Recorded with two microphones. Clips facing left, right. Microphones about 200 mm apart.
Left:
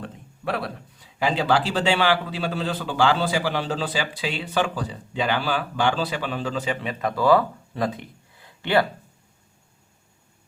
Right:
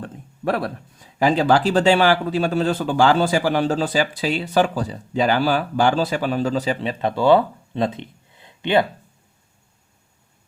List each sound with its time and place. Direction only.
0.0 s speech: 50° right (ahead or behind); by 8.9 s 20° right (ahead or behind)